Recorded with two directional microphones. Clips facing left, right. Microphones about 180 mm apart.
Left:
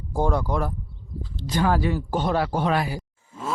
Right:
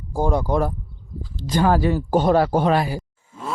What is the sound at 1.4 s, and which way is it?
Speech, 40° right (ahead or behind).